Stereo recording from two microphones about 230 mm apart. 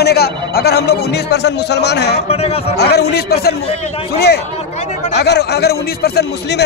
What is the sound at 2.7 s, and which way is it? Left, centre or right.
A man's voice, left.